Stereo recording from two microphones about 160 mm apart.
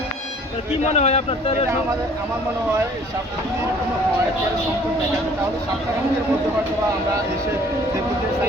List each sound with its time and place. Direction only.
0.8 s speech: 45° left (ahead or behind)